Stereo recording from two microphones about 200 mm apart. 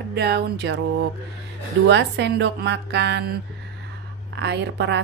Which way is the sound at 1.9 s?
60° right (ahead or behind).